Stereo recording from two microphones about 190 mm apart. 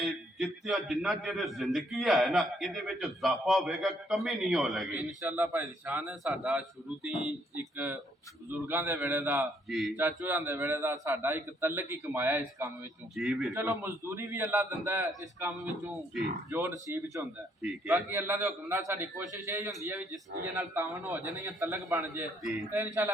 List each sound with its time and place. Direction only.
0.0 s a man's voice: centre (ahead or behind)
13.5 s a man's voice: 10° right (ahead or behind)